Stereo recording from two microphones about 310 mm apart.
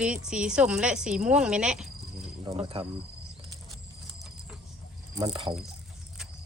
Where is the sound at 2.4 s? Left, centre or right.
Centre.